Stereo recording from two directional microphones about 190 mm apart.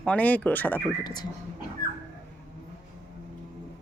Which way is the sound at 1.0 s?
20° left (ahead or behind).